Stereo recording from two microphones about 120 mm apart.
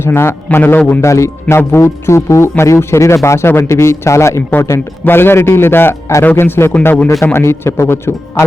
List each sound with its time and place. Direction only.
0.0 s a man's voice: 20° left (ahead or behind)
7.3 s a man's voice: 20° left (ahead or behind)